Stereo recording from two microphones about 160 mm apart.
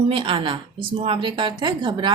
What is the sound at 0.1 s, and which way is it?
A woman's voice, 30° right (ahead or behind).